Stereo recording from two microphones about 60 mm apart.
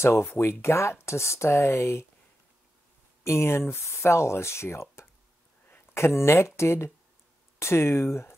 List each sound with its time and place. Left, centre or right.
0.0 s speech: left
3.3 s speech: left